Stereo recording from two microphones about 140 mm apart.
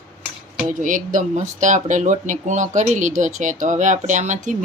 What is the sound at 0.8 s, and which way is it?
Speech, 75° right (ahead or behind).